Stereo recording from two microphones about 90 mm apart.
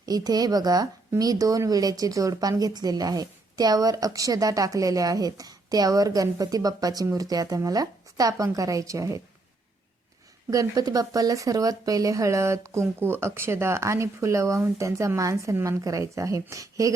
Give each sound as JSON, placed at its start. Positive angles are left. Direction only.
{"t": 0.0, "sound": "a woman's voice", "side_deg": -45}
{"t": 10.5, "sound": "speech", "side_deg": -40}